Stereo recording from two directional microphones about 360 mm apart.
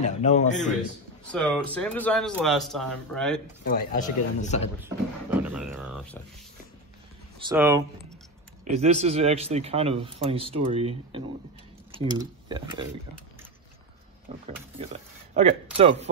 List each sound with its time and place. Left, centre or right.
0.0 s speech: centre
1.3 s a man's voice: centre
3.6 s speech: left
4.8 s a man's voice: centre
7.4 s a man's voice: centre
8.6 s a man's voice: centre
14.3 s a man's voice: centre